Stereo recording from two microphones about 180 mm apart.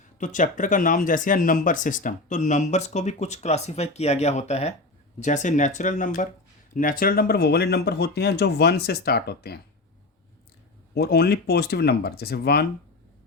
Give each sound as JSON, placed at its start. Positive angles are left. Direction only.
{"t": 0.2, "sound": "speech", "side_deg": 45}
{"t": 10.9, "sound": "speech", "side_deg": 60}